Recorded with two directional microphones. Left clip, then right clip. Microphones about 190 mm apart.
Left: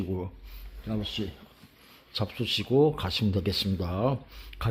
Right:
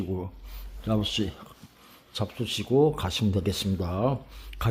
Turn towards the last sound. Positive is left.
turn(degrees=0)  # may be behind; listen again after turning